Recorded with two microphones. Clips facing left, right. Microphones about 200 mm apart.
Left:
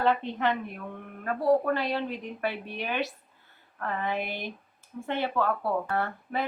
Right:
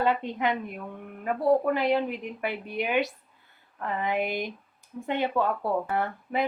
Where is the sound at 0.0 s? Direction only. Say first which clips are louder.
Even; 15° right (ahead or behind).